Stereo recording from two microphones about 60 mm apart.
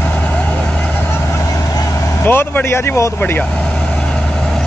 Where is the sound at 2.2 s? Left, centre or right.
Left.